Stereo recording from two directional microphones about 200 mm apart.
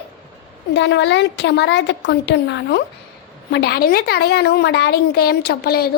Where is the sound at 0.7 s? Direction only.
60° left (ahead or behind).